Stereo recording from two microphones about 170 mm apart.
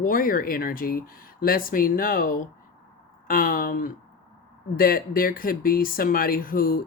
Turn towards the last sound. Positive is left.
turn(degrees=55)  # may be behind; listen again after turning